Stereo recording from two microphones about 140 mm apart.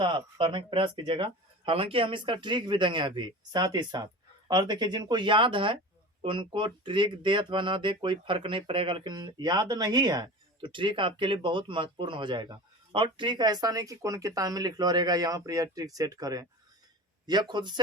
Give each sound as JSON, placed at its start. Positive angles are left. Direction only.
{"t": 0.0, "sound": "speech", "side_deg": -35}